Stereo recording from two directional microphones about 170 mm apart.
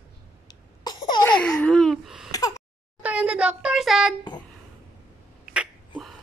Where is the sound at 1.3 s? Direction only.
5° left (ahead or behind).